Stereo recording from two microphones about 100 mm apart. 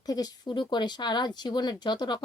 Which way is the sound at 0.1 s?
45° left (ahead or behind).